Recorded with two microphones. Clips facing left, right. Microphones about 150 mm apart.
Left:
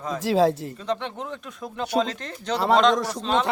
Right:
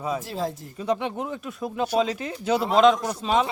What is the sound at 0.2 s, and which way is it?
Speech, 85° left.